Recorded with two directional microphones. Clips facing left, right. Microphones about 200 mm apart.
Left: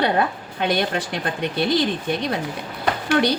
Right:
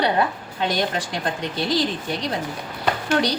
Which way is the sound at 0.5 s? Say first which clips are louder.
Left 2 dB; 60° left (ahead or behind).